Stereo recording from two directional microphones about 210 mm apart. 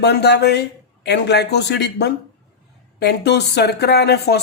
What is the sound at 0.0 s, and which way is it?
Speech, 50° left (ahead or behind).